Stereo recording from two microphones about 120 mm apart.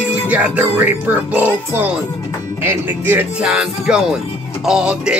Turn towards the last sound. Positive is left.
turn(degrees=-10)  # may be behind; listen again after turning